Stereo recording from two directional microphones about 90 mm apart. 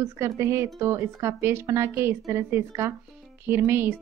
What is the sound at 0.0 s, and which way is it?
A woman's voice, 30° right (ahead or behind).